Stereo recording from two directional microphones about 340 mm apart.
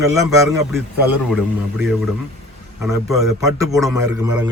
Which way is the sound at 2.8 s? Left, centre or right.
Centre.